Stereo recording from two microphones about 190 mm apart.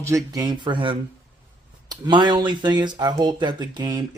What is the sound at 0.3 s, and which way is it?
Speech, 25° right (ahead or behind).